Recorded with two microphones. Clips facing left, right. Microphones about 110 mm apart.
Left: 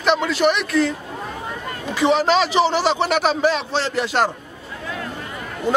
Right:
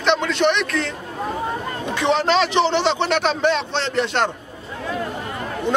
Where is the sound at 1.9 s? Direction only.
5° left (ahead or behind).